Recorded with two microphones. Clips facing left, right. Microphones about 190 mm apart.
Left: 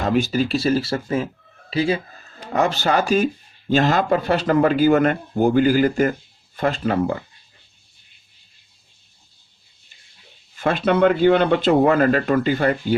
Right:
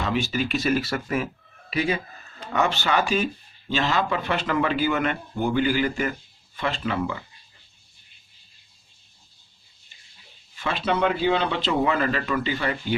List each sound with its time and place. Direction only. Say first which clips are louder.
0.0 s speech: left 6 dB; 40° left (ahead or behind)
10.5 s speech: left 7 dB; 50° left (ahead or behind)